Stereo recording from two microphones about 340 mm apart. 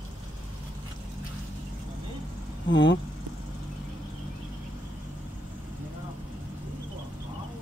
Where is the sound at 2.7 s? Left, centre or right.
Left.